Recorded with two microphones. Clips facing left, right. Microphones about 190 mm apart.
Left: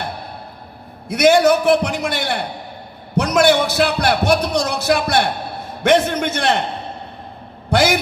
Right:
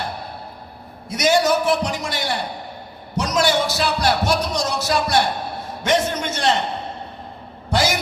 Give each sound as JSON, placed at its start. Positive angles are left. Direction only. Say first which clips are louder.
{"t": 1.0, "sound": "speech", "louder": "left 5 dB", "side_deg": 60}
{"t": 7.7, "sound": "a man's voice", "louder": "left 4 dB", "side_deg": 60}